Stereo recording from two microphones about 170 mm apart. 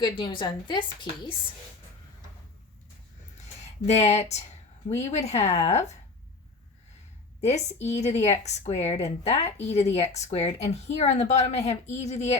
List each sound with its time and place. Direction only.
0.0 s a woman's voice: 30° left (ahead or behind)
3.8 s a woman's voice: 40° left (ahead or behind)
7.4 s a woman's voice: 40° left (ahead or behind)
7.8 s a woman's voice: 15° left (ahead or behind)
8.2 s a woman's voice: 40° left (ahead or behind)